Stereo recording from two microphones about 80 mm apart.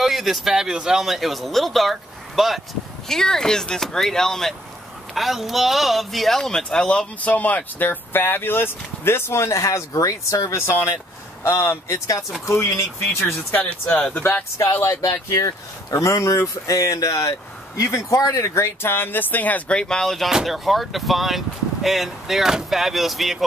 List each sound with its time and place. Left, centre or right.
0.0 s a man's voice: centre; by 12.8 s left
13.5 s speech: centre
14.1 s speech: left
19.8 s speech: centre